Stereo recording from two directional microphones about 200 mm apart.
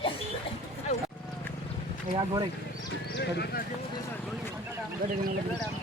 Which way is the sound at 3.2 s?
55° left (ahead or behind).